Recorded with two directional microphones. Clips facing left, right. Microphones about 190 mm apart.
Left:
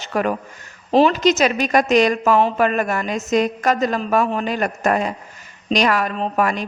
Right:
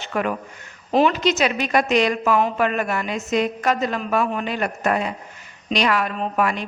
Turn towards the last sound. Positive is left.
turn(degrees=40)  # may be behind; listen again after turning